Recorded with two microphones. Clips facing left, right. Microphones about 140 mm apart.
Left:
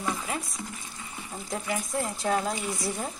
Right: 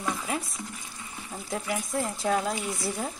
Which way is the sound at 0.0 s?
Centre (ahead or behind).